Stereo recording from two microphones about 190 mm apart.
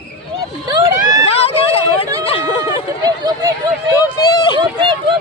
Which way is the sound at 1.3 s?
30° left (ahead or behind).